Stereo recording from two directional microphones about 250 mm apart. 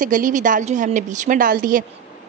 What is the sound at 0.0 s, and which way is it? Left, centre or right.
A woman's voice, right.